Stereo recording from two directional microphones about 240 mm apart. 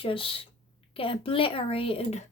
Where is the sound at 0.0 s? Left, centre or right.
Left.